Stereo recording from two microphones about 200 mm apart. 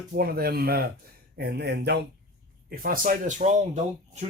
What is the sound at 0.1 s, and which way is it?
Speech, 50° right (ahead or behind).